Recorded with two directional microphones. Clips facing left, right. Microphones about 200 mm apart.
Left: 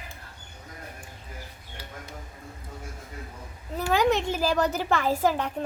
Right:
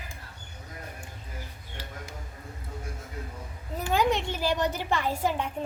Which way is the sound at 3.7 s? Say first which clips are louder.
Left 3 dB; 70° left (ahead or behind).